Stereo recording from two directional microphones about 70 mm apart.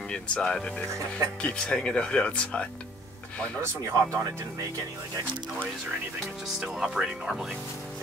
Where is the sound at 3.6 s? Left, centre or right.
Right.